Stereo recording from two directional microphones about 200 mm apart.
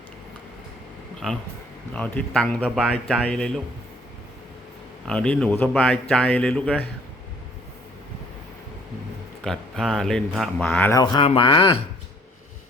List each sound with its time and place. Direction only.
1.9 s speech: 5° left (ahead or behind)
5.0 s speech: 5° left (ahead or behind)
9.4 s speech: centre (ahead or behind)
11.0 s speech: 25° left (ahead or behind)